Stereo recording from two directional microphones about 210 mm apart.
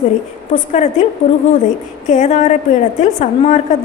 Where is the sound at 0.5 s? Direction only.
35° left (ahead or behind).